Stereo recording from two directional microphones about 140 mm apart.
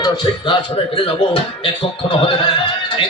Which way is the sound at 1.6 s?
35° left (ahead or behind).